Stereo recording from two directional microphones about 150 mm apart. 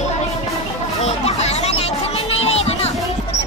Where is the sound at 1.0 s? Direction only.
45° left (ahead or behind).